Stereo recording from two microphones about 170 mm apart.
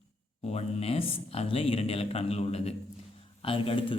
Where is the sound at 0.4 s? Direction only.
35° left (ahead or behind).